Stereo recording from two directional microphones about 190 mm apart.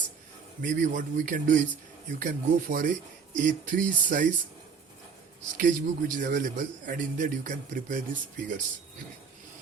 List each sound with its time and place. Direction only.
0.6 s a man's voice: 45° right (ahead or behind)
5.5 s a man's voice: 45° right (ahead or behind)